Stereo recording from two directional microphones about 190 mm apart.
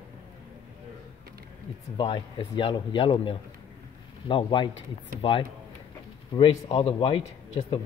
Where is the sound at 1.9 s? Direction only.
25° left (ahead or behind).